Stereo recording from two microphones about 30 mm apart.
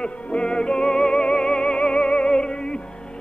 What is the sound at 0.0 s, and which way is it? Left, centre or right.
Music, left.